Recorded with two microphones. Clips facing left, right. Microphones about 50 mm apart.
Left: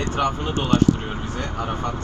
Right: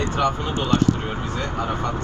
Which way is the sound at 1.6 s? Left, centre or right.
Right.